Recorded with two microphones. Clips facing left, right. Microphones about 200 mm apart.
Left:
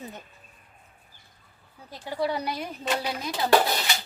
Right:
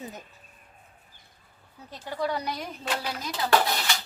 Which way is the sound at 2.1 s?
10° left (ahead or behind).